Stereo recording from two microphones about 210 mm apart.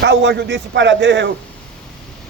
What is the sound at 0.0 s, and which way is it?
Speech, 60° right (ahead or behind).